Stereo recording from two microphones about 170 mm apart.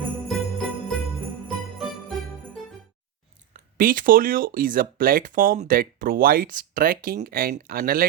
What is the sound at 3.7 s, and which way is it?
Speech, 55° right (ahead or behind).